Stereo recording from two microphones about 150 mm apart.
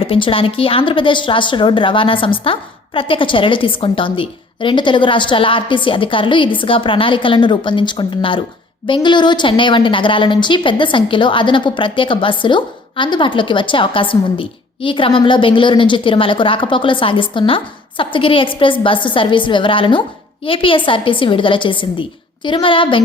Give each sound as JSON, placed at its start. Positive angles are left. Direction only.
{"t": 0.0, "sound": "a woman's voice", "side_deg": 35}